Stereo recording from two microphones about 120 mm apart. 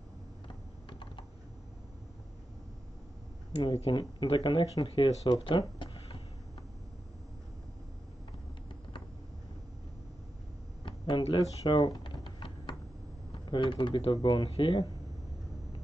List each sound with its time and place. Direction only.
0.8 s typing: 40° left (ahead or behind)
3.6 s speech: 45° left (ahead or behind)
10.9 s computer keyboard: 45° left (ahead or behind)
13.5 s speech: 40° left (ahead or behind)